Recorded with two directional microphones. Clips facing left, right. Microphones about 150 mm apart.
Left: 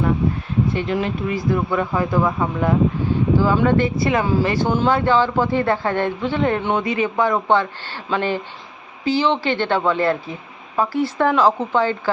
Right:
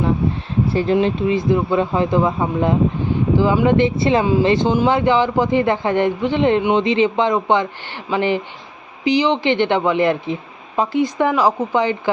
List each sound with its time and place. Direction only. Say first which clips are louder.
0.7 s speech: right 5 dB; 35° right (ahead or behind)
0.9 s speech: right 5 dB; 25° right (ahead or behind)